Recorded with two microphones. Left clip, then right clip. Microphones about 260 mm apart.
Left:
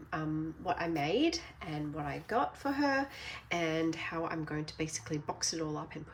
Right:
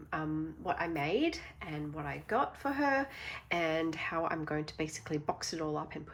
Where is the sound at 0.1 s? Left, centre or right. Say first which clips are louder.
Even; centre.